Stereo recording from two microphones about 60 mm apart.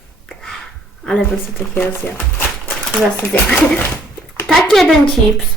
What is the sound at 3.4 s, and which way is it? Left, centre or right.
Speech, left.